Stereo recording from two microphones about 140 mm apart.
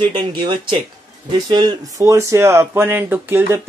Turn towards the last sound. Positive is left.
turn(degrees=-15)  # may be behind; listen again after turning